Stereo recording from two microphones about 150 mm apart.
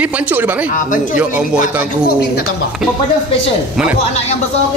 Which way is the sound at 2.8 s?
Centre (ahead or behind).